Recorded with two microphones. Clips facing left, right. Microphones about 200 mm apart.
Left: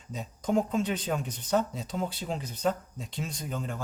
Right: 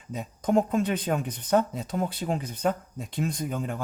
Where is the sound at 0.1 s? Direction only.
55° right (ahead or behind).